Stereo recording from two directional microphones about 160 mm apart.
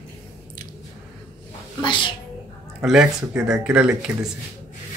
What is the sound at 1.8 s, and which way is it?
Speech, 30° left (ahead or behind).